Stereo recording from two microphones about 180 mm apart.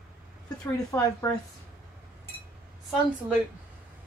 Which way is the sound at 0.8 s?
20° left (ahead or behind).